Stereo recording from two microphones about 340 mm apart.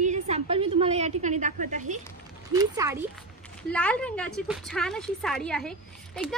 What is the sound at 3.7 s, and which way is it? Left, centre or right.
A woman's voice, centre.